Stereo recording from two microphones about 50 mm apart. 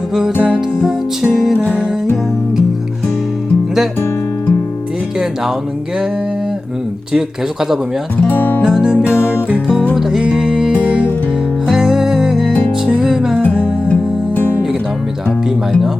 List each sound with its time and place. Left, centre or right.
0.9 s music: centre
1.5 s music: left
7.1 s music: centre
8.2 s music: left
8.6 s music: centre
10.8 s music: right
11.7 s music: centre
13.6 s music: left
14.3 s music: left